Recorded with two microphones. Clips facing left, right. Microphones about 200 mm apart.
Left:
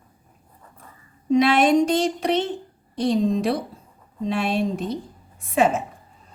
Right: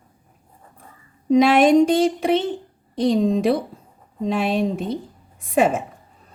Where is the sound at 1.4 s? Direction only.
50° right (ahead or behind).